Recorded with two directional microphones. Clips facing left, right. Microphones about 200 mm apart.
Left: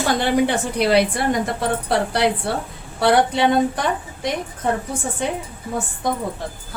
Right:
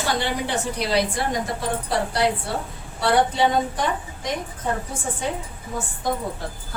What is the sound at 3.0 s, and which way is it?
Speech, 70° left (ahead or behind).